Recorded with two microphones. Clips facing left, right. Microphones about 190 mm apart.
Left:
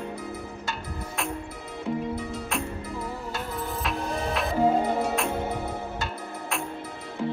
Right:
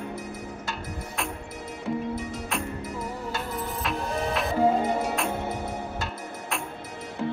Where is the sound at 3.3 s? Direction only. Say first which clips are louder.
Even; centre (ahead or behind).